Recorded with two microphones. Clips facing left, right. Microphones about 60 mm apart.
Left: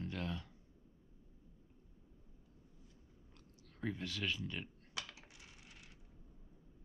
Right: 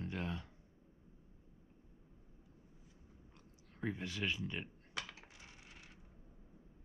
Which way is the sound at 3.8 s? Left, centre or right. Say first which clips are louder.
Right 1 dB; right.